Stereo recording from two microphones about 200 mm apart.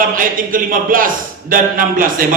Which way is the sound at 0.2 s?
45° right (ahead or behind).